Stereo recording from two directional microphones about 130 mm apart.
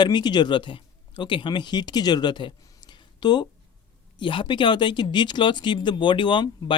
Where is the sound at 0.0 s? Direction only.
35° left (ahead or behind).